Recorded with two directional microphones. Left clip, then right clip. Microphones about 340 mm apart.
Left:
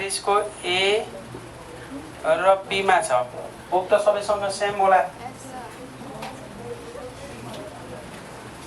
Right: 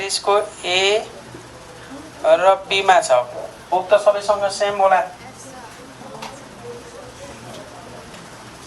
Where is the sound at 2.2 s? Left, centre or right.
Right.